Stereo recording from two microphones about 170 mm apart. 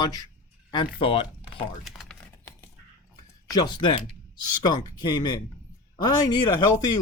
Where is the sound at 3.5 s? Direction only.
25° left (ahead or behind).